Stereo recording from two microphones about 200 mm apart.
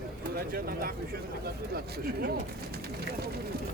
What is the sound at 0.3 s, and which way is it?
Speech, 50° right (ahead or behind).